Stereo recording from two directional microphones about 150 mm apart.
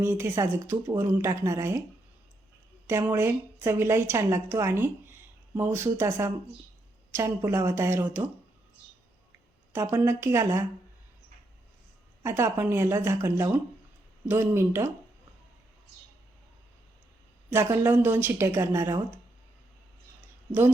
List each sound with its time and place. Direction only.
0.0 s speech: 15° right (ahead or behind)
2.8 s speech: 15° right (ahead or behind)
9.7 s speech: 15° right (ahead or behind)
12.2 s speech: 15° right (ahead or behind)
17.5 s speech: 15° right (ahead or behind)